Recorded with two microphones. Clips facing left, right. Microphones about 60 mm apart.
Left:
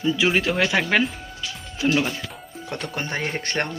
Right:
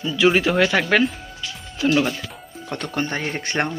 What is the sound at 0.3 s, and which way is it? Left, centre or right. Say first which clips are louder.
Speech: right 8 dB; centre.